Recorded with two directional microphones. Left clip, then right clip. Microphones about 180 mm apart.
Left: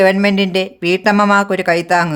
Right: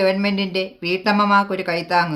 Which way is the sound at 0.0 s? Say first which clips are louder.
Left 7 dB; 55° left (ahead or behind).